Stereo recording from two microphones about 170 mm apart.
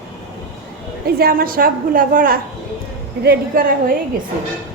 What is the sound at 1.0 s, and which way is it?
A woman's voice, 60° right (ahead or behind).